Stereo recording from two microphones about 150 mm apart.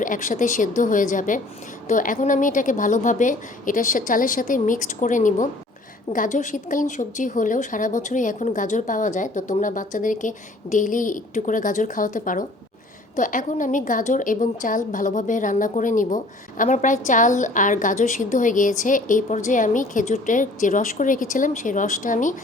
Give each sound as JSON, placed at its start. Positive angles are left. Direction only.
{"t": 0.0, "sound": "a woman's voice", "side_deg": 60}